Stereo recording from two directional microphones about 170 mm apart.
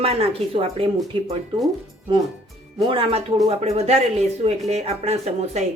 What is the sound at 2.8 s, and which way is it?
Speech, 30° right (ahead or behind).